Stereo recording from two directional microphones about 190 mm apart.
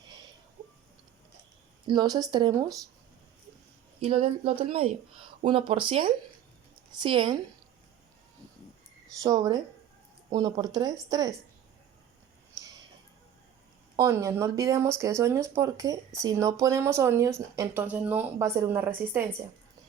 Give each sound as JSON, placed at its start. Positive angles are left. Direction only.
{"t": 1.9, "sound": "speech", "side_deg": -20}
{"t": 4.0, "sound": "speech", "side_deg": -30}
{"t": 9.2, "sound": "speech", "side_deg": -20}
{"t": 13.9, "sound": "speech", "side_deg": -15}